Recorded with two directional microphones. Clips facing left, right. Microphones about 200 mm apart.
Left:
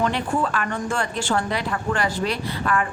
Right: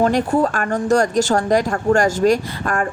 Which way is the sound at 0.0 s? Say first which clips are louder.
Right 7 dB; 40° right (ahead or behind).